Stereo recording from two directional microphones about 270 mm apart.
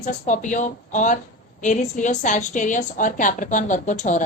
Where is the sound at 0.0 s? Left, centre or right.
Left.